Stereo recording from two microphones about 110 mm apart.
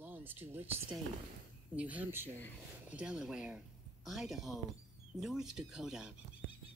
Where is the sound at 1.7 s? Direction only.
15° right (ahead or behind).